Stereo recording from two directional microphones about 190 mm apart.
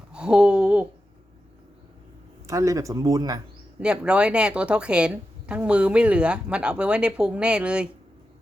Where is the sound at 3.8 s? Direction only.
5° right (ahead or behind).